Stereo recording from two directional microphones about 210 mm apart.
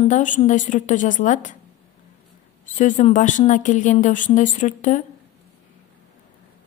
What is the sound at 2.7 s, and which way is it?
A woman's voice, 35° left (ahead or behind).